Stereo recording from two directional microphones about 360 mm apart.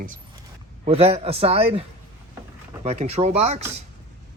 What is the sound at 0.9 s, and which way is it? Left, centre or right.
Speech, centre.